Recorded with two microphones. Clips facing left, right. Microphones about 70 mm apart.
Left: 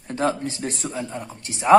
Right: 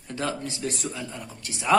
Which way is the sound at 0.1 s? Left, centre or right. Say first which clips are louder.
Left 6 dB; left.